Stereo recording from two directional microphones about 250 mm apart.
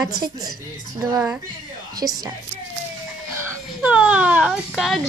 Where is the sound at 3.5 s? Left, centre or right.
Centre.